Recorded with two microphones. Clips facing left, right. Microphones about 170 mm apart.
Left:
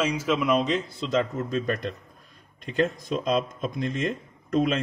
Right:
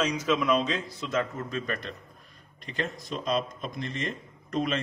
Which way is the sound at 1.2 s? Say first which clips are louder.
Left 4 dB; 40° left (ahead or behind).